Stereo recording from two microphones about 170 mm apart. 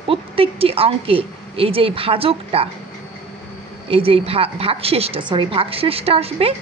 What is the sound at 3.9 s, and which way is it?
A woman's voice, 35° right (ahead or behind).